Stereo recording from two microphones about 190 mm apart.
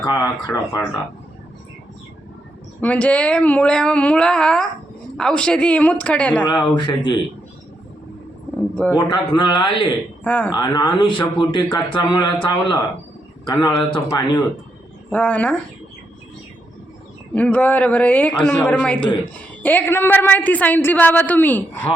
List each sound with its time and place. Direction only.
0.0 s a man's voice: 20° left (ahead or behind)
2.8 s a woman's voice: 10° left (ahead or behind)
6.4 s a man's voice: 25° left (ahead or behind)
9.0 s a man's voice: 25° left (ahead or behind)
10.2 s a woman's voice: 10° left (ahead or behind)
10.5 s a man's voice: 20° left (ahead or behind)
15.1 s a woman's voice: 10° left (ahead or behind)
17.3 s a woman's voice: 5° left (ahead or behind)